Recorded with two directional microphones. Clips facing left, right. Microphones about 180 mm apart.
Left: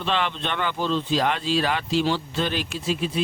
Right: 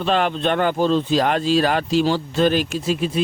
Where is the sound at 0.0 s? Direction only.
45° right (ahead or behind).